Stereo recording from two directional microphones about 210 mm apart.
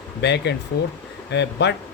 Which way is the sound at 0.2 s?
55° left (ahead or behind).